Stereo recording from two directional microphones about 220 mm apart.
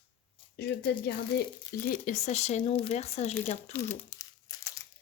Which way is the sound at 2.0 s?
30° left (ahead or behind).